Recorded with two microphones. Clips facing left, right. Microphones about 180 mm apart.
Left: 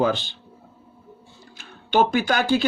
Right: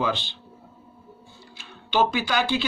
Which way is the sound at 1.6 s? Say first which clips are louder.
Left 3 dB; 50° left (ahead or behind).